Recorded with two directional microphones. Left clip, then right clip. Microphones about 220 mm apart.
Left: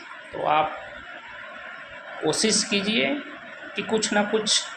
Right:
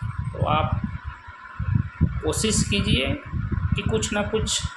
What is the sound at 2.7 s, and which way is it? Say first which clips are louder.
A man's voice: left 1 dB; 20° right (ahead or behind).